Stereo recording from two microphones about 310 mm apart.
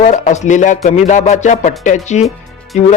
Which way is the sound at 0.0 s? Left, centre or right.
Left.